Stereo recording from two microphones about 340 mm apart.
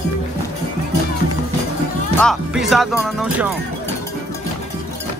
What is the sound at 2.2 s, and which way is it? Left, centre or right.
Music, centre.